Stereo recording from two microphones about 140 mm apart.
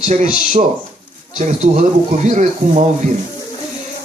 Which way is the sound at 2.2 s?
55° right (ahead or behind).